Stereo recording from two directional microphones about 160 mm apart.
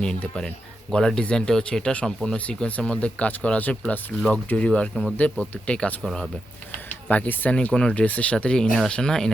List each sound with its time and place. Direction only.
0.0 s speech: 5° left (ahead or behind)